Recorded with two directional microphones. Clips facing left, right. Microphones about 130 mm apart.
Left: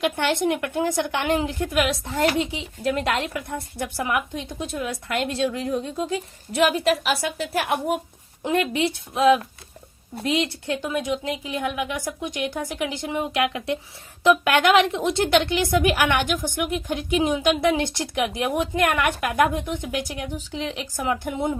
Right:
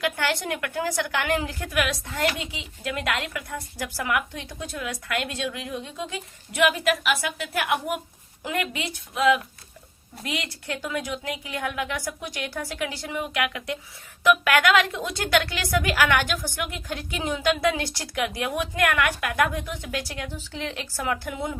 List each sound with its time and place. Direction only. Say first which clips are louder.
0.0 s a woman's voice: left 5 dB; 25° left (ahead or behind)